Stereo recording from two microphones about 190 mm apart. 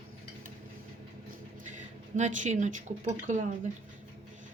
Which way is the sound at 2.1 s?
40° right (ahead or behind).